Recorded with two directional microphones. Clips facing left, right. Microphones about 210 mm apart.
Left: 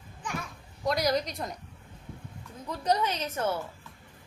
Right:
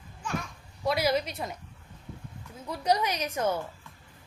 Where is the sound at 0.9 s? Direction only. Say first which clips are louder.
Right 1 dB; 5° right (ahead or behind).